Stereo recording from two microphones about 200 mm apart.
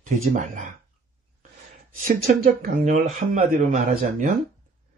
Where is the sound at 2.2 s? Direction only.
40° right (ahead or behind).